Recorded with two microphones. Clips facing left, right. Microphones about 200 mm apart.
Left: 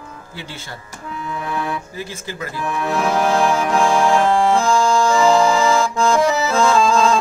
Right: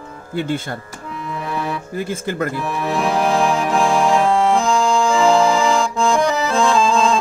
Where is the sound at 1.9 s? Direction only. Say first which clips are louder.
Right 7 dB; 55° right (ahead or behind).